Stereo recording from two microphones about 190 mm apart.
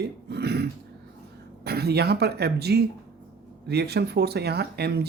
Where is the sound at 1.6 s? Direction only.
55° right (ahead or behind).